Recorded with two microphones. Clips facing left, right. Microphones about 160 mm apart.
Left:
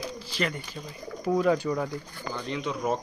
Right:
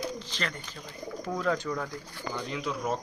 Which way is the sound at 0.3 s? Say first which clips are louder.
Left 5 dB; 10° left (ahead or behind).